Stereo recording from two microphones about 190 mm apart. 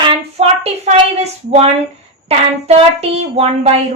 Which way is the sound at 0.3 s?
35° right (ahead or behind).